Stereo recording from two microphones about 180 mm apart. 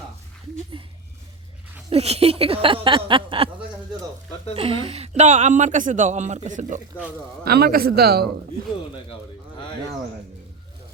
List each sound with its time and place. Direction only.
0.7 s speech: 30° right (ahead or behind)
7.4 s a man's voice: 60° right (ahead or behind)